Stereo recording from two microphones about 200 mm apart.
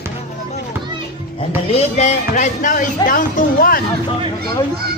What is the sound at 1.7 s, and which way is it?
Speech, 35° left (ahead or behind).